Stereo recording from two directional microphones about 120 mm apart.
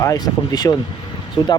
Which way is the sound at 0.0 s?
30° left (ahead or behind).